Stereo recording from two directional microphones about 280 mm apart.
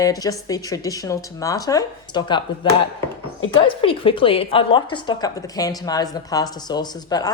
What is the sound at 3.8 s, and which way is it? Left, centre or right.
A woman's voice, centre.